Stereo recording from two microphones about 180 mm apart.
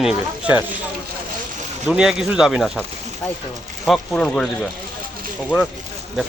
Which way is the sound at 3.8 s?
Centre (ahead or behind).